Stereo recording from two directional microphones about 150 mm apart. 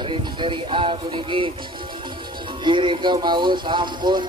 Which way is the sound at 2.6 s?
35° right (ahead or behind).